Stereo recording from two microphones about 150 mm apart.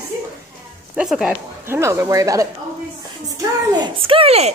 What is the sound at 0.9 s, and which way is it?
Speech, 5° right (ahead or behind).